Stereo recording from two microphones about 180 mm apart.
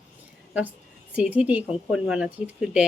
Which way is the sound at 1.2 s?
10° right (ahead or behind).